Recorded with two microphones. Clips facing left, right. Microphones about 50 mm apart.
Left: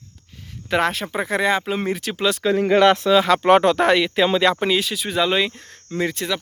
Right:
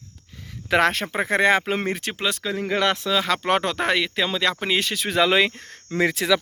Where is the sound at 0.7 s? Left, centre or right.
Right.